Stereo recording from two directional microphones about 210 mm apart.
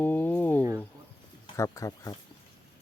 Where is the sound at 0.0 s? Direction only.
10° left (ahead or behind).